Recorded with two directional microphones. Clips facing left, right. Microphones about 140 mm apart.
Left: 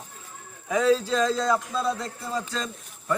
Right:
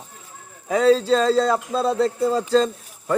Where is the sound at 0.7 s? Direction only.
30° right (ahead or behind).